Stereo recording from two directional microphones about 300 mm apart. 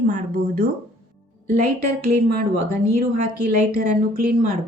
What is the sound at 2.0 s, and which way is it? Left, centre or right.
Speech, right.